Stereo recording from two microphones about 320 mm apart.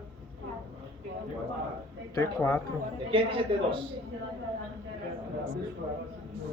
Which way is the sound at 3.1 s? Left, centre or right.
Centre.